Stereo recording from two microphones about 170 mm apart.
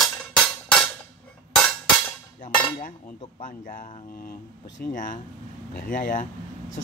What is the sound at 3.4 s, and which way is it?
Speech, 50° left (ahead or behind).